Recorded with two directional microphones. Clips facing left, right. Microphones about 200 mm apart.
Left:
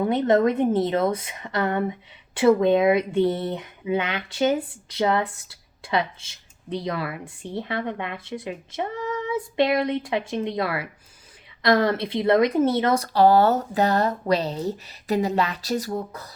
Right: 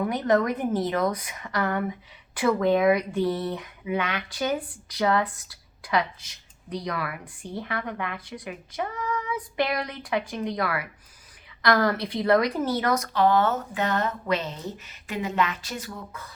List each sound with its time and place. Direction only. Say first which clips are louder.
0.0 s a woman's voice: left 4 dB; 25° left (ahead or behind)